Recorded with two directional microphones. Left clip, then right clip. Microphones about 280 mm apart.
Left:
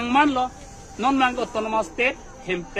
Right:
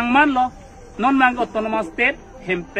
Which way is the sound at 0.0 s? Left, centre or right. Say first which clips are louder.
Right 4 dB; centre.